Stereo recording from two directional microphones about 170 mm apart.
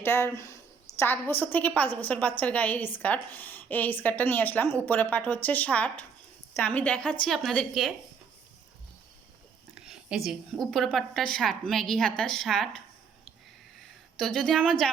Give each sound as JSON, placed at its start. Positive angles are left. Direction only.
{"t": 0.0, "sound": "a woman's voice", "side_deg": 15}
{"t": 9.7, "sound": "a woman's voice", "side_deg": -5}
{"t": 13.8, "sound": "a woman's voice", "side_deg": 5}